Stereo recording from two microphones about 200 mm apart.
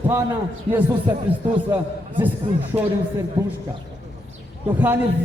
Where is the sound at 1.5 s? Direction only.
25° right (ahead or behind).